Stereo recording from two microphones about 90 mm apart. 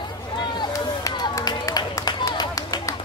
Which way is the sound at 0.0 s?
60° left (ahead or behind).